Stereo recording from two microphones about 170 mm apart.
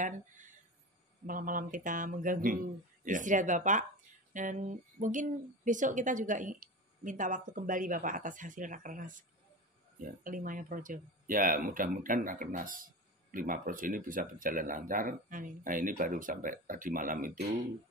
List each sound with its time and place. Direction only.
1.2 s speech: 55° right (ahead or behind)